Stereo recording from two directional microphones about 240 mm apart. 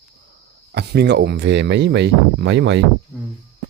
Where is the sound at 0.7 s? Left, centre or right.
Right.